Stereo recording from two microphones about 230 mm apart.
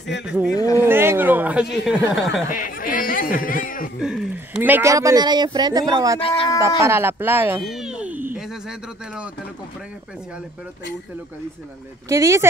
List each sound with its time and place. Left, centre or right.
0.6 s speech: centre
0.8 s speech: centre
2.5 s a sound: left
4.0 s speech: centre
6.2 s speech: left
6.8 s speech: centre
7.6 s a sound: centre
12.1 s speech: centre